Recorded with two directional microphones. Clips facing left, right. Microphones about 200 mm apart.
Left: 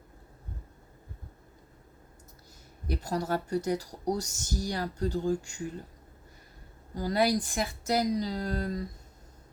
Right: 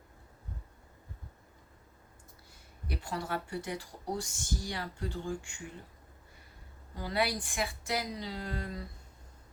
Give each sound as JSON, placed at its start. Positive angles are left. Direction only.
{"t": 2.8, "sound": "speech", "side_deg": 40}
{"t": 6.9, "sound": "speech", "side_deg": 40}